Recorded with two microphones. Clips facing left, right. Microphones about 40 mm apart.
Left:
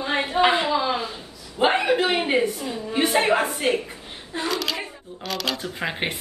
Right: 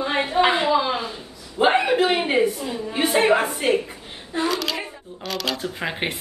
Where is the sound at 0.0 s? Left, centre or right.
Centre.